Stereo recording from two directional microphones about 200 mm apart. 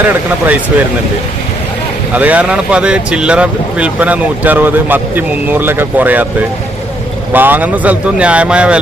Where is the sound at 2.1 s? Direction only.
5° right (ahead or behind).